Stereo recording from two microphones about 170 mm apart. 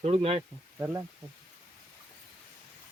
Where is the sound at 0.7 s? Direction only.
15° right (ahead or behind).